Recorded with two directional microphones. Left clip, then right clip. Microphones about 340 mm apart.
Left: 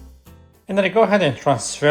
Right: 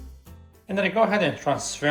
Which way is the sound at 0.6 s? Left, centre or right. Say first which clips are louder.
Left 5 dB; left.